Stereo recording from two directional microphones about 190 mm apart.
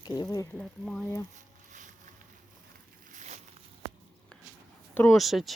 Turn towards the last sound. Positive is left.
turn(degrees=0)  # may be behind; listen again after turning